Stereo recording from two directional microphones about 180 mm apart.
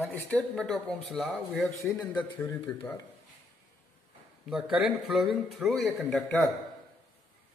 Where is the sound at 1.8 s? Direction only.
15° left (ahead or behind).